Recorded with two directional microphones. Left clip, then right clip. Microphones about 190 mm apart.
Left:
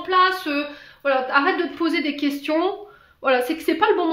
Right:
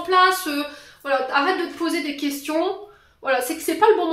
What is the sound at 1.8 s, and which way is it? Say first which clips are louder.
Speech: left 2 dB; 45° left (ahead or behind).